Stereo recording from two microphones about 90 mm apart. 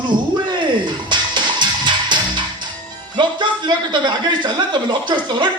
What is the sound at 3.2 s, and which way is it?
A man's voice, 55° right (ahead or behind).